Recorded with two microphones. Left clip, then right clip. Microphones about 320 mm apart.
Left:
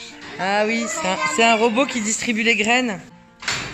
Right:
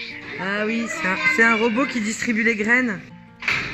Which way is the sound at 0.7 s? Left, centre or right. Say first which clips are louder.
Left 3 dB; left.